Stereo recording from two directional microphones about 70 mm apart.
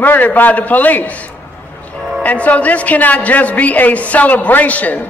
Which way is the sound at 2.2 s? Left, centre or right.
Left.